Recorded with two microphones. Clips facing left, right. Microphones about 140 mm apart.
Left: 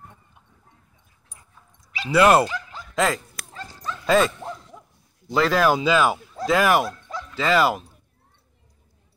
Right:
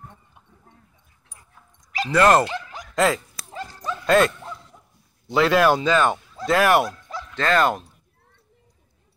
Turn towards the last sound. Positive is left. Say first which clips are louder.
# even
turn(degrees=5)  # may be behind; listen again after turning